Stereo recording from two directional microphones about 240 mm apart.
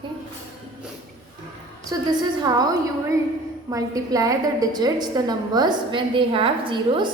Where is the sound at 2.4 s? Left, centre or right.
Centre.